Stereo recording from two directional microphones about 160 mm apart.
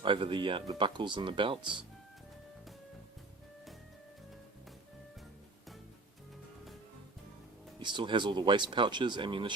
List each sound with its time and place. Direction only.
0.0 s speech: 30° right (ahead or behind)
7.8 s speech: 30° right (ahead or behind)